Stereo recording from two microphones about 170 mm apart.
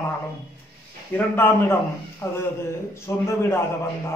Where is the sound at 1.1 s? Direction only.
15° left (ahead or behind).